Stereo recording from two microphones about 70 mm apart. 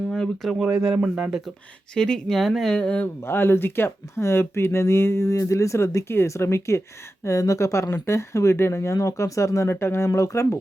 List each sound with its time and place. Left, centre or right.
0.1 s speech: centre
0.6 s speech: centre
2.0 s speech: centre
2.7 s speech: centre
3.2 s speech: left
10.1 s speech: left